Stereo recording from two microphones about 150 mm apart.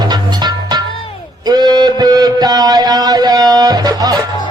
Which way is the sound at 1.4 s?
25° right (ahead or behind).